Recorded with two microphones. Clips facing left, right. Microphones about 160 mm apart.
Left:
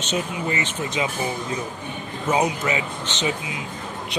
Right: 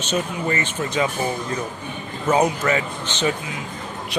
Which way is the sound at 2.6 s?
15° left (ahead or behind).